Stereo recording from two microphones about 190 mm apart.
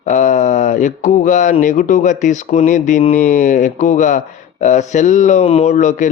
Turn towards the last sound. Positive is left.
turn(degrees=40)  # may be behind; listen again after turning